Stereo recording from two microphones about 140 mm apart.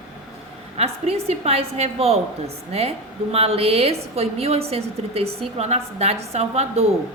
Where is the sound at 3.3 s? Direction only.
45° right (ahead or behind).